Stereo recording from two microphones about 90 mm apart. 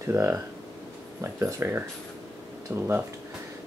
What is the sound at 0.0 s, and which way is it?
Speech, 30° right (ahead or behind).